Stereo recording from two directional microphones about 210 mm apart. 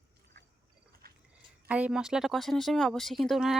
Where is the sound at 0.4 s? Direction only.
50° right (ahead or behind).